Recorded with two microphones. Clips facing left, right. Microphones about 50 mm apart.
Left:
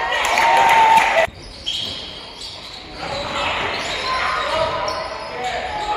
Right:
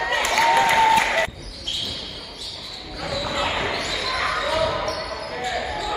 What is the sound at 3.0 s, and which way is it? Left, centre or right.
Basketball bounce, left.